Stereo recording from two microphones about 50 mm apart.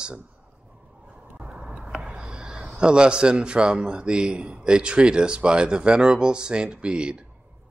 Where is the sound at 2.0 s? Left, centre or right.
Centre.